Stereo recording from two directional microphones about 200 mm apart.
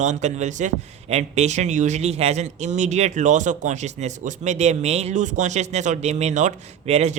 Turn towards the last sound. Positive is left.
turn(degrees=-35)  # may be behind; listen again after turning